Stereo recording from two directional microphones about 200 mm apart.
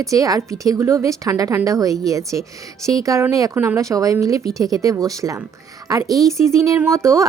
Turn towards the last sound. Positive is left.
turn(degrees=-15)  # may be behind; listen again after turning